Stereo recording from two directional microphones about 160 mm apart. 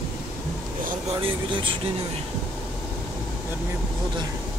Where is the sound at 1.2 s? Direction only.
30° right (ahead or behind).